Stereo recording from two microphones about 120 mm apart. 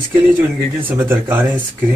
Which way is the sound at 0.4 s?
15° right (ahead or behind).